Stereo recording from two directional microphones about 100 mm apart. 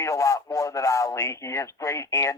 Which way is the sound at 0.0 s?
30° left (ahead or behind).